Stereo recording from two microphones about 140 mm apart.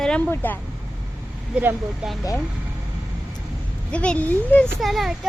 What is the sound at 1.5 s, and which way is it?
Speech, 10° right (ahead or behind).